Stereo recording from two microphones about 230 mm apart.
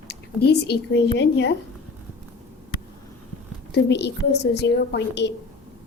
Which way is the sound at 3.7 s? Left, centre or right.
Left.